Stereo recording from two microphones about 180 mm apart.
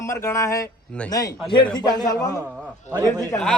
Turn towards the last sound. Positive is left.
turn(degrees=5)  # may be behind; listen again after turning